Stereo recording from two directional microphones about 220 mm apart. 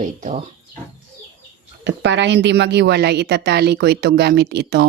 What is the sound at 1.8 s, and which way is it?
A woman's voice, 55° right (ahead or behind).